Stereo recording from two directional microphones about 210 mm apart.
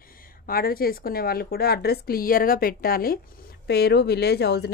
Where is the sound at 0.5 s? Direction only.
45° left (ahead or behind).